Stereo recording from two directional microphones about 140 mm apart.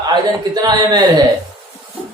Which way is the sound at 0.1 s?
30° right (ahead or behind).